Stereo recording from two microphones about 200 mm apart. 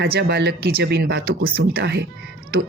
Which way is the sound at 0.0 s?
55° right (ahead or behind).